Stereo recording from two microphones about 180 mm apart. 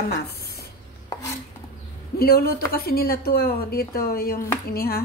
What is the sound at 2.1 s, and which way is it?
Speech, 55° left (ahead or behind).